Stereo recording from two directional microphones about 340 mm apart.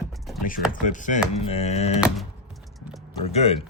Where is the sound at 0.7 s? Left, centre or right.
Left.